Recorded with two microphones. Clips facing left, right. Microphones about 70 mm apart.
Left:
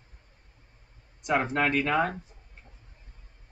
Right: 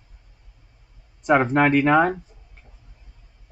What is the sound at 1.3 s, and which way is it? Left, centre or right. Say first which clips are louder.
Speech: right 8 dB; right.